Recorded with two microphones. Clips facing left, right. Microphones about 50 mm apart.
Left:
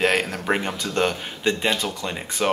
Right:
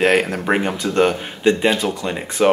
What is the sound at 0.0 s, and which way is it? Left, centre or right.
Speech, centre.